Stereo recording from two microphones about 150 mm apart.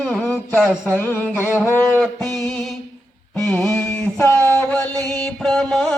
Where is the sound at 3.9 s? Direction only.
15° left (ahead or behind).